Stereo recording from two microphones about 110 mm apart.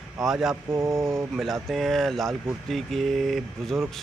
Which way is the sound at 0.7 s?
25° right (ahead or behind).